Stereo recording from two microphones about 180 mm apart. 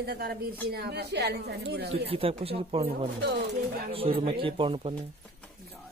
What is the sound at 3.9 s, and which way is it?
A man's voice, 30° right (ahead or behind).